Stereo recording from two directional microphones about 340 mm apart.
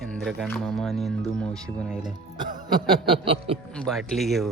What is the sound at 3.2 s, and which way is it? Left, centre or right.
Speech, centre.